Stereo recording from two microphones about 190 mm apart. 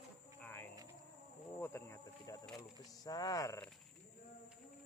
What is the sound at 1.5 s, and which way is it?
Speech, 10° left (ahead or behind).